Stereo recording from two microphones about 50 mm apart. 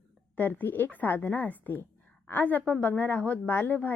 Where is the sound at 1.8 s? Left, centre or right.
Left.